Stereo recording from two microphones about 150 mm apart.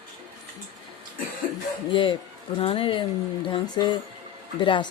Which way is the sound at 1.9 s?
35° left (ahead or behind).